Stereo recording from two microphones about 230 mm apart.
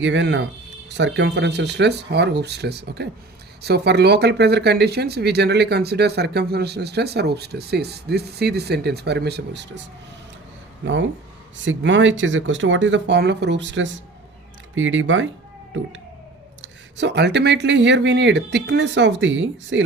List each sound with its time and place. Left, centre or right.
0.0 s speech: right
10.8 s speech: right
16.6 s speech: right